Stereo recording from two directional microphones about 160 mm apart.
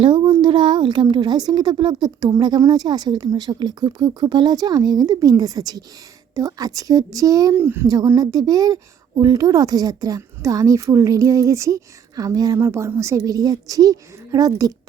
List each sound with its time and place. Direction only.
0.0 s speech: 30° right (ahead or behind)